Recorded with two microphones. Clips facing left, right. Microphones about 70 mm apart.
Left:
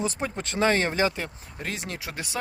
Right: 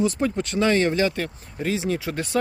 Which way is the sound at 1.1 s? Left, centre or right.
Centre.